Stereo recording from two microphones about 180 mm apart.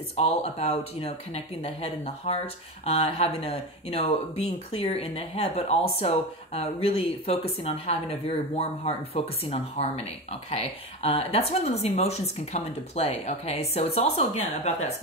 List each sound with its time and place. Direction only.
0.1 s speech: 35° left (ahead or behind)